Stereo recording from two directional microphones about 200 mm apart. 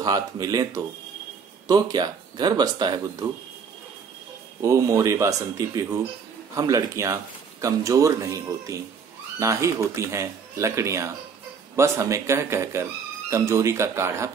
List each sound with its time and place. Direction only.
0.0 s speech: 20° right (ahead or behind)
4.6 s speech: 15° right (ahead or behind)